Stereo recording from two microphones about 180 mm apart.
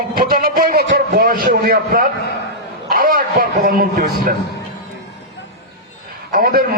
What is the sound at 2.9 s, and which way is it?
A man's voice, 55° right (ahead or behind).